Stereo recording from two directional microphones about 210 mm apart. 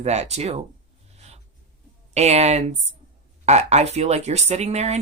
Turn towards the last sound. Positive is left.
turn(degrees=-30)  # may be behind; listen again after turning